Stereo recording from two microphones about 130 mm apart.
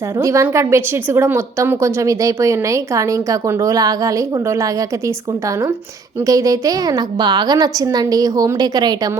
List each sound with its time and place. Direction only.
0.2 s a woman's voice: 25° right (ahead or behind)
6.2 s a woman's voice: 25° right (ahead or behind)